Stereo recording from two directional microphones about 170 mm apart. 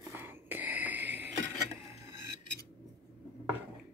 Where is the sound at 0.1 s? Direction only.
10° right (ahead or behind).